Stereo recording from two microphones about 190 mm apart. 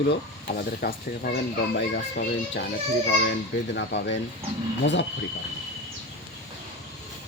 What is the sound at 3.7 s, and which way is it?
Speech, 65° left (ahead or behind).